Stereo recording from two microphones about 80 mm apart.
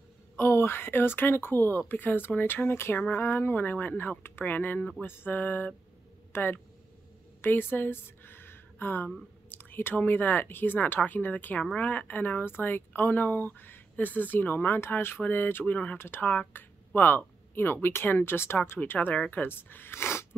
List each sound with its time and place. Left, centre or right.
0.4 s speech: left